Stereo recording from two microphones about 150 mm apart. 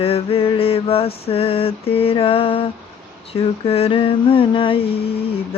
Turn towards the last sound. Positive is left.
turn(degrees=40)  # may be behind; listen again after turning